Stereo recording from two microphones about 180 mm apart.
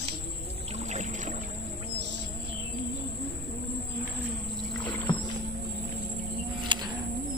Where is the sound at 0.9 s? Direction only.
40° right (ahead or behind).